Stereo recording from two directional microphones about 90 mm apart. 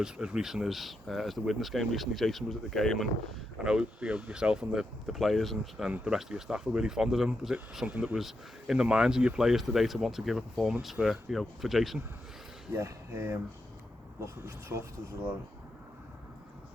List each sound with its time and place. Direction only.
0.0 s speech: 5° right (ahead or behind)
3.6 s speech: 10° right (ahead or behind)
12.7 s speech: 30° right (ahead or behind)